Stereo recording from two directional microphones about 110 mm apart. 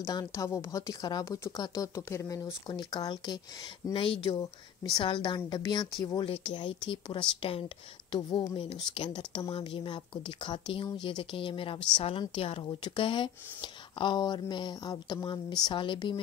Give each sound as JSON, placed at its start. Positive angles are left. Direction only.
{"t": 0.0, "sound": "a woman's voice", "side_deg": 35}
{"t": 3.9, "sound": "speech", "side_deg": 55}
{"t": 4.4, "sound": "a woman's voice", "side_deg": 35}
{"t": 5.0, "sound": "speech", "side_deg": 45}
{"t": 6.2, "sound": "a woman's voice", "side_deg": 60}